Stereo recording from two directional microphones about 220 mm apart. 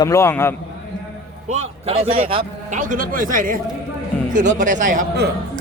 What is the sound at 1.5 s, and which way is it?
A man's voice, 30° right (ahead or behind).